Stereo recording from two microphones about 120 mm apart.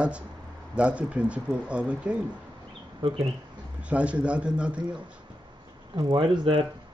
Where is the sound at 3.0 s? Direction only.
45° right (ahead or behind).